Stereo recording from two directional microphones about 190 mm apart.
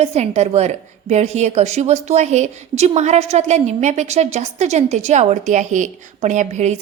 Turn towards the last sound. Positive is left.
turn(degrees=-40)  # may be behind; listen again after turning